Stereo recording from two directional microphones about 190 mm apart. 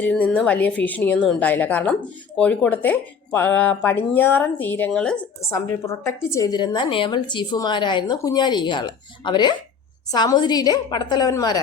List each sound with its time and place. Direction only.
0.0 s speech: 5° left (ahead or behind)
5.5 s a woman's voice: 15° left (ahead or behind)